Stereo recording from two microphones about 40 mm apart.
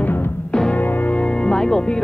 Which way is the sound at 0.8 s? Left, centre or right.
Left.